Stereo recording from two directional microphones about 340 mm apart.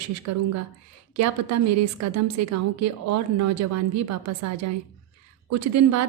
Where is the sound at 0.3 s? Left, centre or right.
Right.